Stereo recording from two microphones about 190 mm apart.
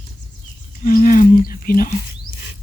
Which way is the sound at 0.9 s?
45° left (ahead or behind).